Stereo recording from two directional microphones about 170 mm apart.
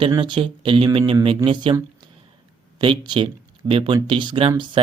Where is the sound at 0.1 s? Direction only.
30° right (ahead or behind).